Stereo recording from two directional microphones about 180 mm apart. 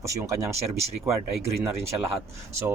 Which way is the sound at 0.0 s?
15° right (ahead or behind).